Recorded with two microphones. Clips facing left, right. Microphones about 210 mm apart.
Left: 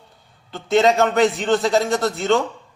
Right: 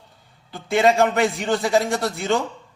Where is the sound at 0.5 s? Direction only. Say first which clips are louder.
Left 2 dB; 10° right (ahead or behind).